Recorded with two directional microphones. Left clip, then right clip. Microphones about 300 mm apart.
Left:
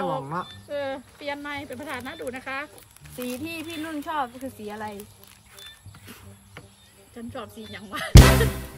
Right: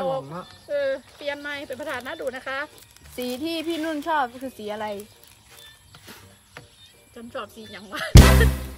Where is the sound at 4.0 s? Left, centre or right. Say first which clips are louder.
Right 3 dB; right.